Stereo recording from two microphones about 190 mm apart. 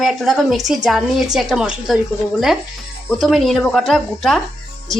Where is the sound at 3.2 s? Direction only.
Centre (ahead or behind).